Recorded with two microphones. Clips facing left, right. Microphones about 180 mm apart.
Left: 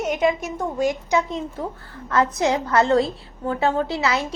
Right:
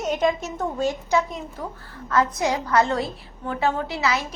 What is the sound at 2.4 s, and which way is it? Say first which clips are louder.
Speech: left 2 dB; 25° left (ahead or behind).